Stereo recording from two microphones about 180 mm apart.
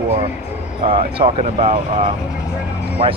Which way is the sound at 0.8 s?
30° right (ahead or behind).